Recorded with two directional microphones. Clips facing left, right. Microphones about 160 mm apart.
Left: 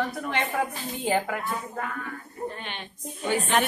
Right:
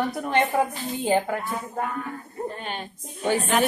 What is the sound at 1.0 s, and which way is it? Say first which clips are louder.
Speech: right 3 dB; 30° right (ahead or behind).